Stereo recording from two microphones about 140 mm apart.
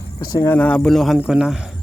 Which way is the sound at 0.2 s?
25° left (ahead or behind).